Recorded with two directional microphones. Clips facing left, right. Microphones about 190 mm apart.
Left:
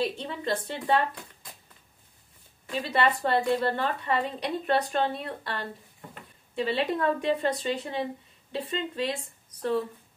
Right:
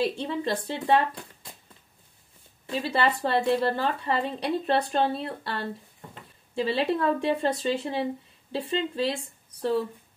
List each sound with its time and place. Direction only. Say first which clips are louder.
0.0 s speech: right 3 dB; 30° right (ahead or behind)
2.6 s a woman's voice: right 1 dB; 30° right (ahead or behind)